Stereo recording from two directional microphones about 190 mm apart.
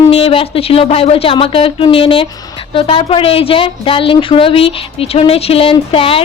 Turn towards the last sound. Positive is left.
turn(degrees=30)  # may be behind; listen again after turning